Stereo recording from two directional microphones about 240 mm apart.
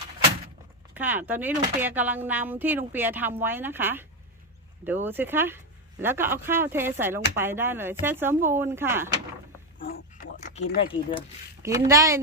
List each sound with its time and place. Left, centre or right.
0.9 s speech: centre
5.0 s speech: centre
9.7 s dog: left
11.6 s speech: centre